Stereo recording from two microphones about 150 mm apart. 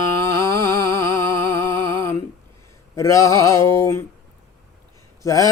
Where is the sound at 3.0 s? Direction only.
20° left (ahead or behind).